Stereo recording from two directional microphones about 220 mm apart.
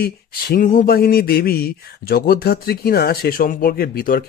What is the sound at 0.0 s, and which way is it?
Speech, 45° left (ahead or behind).